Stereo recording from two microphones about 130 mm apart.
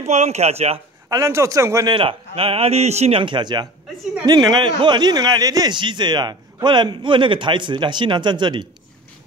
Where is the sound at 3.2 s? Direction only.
35° right (ahead or behind).